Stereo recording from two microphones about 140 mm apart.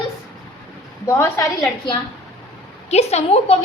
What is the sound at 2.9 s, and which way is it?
Speech, 50° left (ahead or behind).